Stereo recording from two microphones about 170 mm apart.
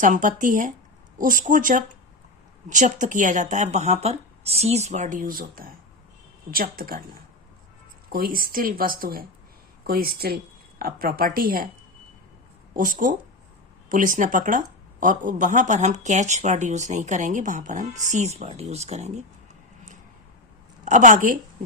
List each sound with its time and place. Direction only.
0.0 s speech: 50° right (ahead or behind)
12.7 s speech: 55° right (ahead or behind)
20.8 s speech: 45° right (ahead or behind)